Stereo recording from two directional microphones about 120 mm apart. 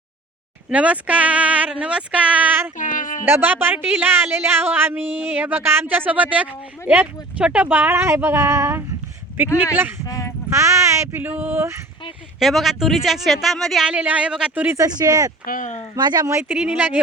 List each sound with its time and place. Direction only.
0.7 s speech: 10° right (ahead or behind)
2.7 s a sound: 90° left
3.2 s speech: 15° right (ahead or behind)
10.1 s a sound: 30° left (ahead or behind)
10.5 s speech: 25° right (ahead or behind)
12.4 s speech: centre (ahead or behind)
13.8 s speech: 10° right (ahead or behind)
14.8 s speech: 35° right (ahead or behind)
15.5 s speech: 90° left
16.0 s speech: 35° right (ahead or behind)
16.4 s speech: 10° right (ahead or behind)